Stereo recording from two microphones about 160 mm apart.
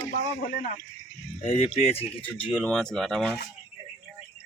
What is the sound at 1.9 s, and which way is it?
Speech, 10° left (ahead or behind).